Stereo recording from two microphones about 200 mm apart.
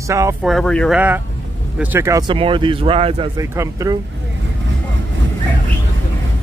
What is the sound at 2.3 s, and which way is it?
Speech, 25° right (ahead or behind).